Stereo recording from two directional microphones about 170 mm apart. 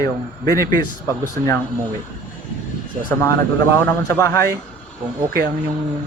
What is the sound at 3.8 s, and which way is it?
Speech, 15° left (ahead or behind).